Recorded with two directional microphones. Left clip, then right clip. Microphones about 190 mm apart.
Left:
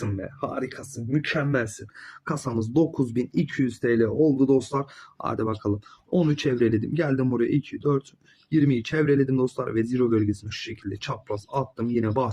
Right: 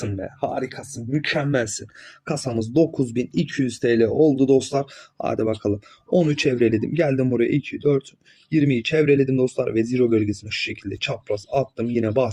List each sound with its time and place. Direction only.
0.2 s speech: 25° right (ahead or behind)
2.2 s speech: 15° right (ahead or behind)
3.8 s speech: 35° right (ahead or behind)
5.1 s speech: 15° right (ahead or behind)